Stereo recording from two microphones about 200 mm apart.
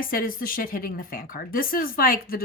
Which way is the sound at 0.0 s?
45° left (ahead or behind).